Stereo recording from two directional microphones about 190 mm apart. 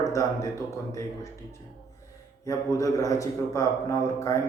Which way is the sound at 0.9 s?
15° left (ahead or behind).